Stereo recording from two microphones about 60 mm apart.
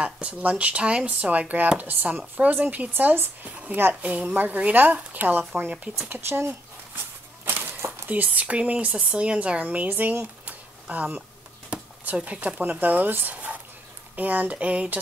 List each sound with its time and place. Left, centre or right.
0.0 s speech: right
6.2 s speech: right
7.4 s a sound: right
8.1 s speech: right
11.7 s a sound: right
12.3 s speech: right